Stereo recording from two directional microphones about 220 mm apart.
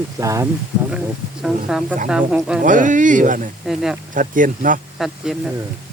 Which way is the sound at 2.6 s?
35° right (ahead or behind).